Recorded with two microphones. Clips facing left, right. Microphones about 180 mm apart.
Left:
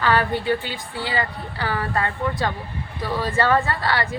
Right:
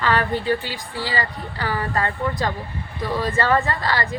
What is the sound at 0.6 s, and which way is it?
Speech, 20° left (ahead or behind).